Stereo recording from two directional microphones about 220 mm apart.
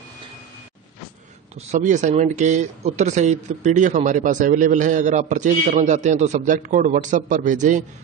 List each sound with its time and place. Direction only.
1.7 s speech: 35° right (ahead or behind)